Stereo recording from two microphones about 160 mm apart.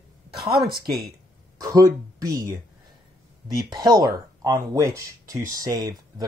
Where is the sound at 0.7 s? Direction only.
70° right (ahead or behind).